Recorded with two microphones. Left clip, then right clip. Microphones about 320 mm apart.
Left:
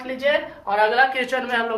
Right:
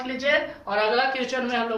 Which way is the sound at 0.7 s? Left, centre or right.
Left.